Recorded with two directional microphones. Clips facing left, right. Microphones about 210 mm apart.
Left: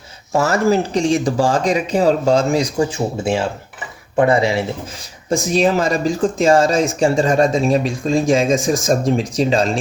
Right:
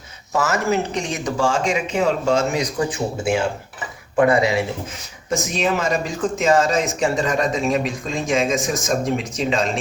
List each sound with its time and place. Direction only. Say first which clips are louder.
0.3 s speech: left 5 dB; 35° left (ahead or behind)